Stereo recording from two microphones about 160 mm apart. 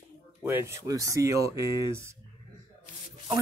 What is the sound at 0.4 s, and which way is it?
Speech, 15° right (ahead or behind).